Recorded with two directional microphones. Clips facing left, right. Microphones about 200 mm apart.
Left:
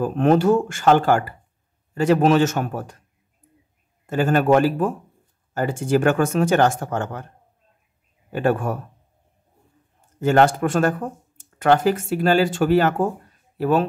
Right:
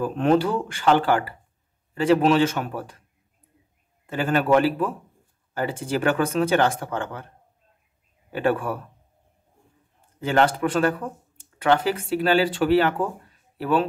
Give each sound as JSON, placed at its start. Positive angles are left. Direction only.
{"t": 0.0, "sound": "speech", "side_deg": 45}
{"t": 4.0, "sound": "speech", "side_deg": 45}
{"t": 8.3, "sound": "speech", "side_deg": 45}
{"t": 10.2, "sound": "speech", "side_deg": 45}